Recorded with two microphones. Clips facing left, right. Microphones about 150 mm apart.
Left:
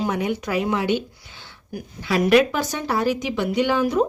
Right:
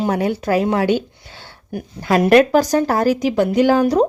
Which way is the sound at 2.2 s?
40° right (ahead or behind).